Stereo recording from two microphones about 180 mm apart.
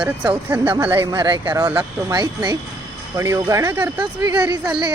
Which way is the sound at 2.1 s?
25° right (ahead or behind).